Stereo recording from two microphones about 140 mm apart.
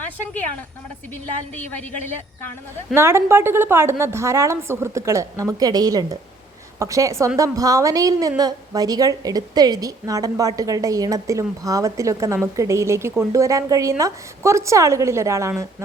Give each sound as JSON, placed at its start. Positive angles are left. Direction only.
{"t": 2.9, "sound": "a woman's voice", "side_deg": -20}